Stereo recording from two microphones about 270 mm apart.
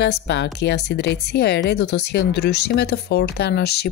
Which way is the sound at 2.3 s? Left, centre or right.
Left.